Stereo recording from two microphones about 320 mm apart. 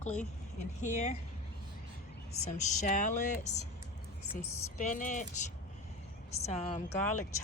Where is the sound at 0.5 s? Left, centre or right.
Left.